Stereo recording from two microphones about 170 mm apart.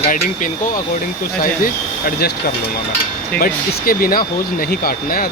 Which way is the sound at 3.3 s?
60° left (ahead or behind).